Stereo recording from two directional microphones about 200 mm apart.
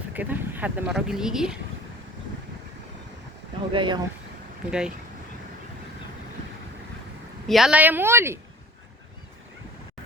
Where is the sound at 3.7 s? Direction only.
25° right (ahead or behind).